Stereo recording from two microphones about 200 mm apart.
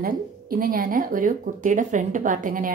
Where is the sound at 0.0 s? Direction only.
45° right (ahead or behind).